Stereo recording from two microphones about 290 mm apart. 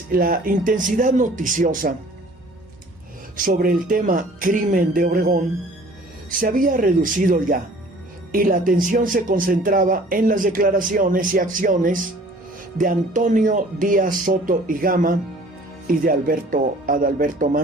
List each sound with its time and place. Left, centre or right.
0.1 s speech: right
3.3 s speech: right
6.4 s speech: right